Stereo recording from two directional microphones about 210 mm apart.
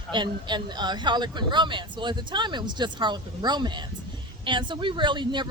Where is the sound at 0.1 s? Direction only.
20° right (ahead or behind).